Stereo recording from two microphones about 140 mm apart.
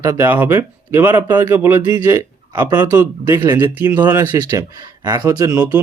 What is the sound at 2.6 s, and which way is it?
Speech, 25° right (ahead or behind).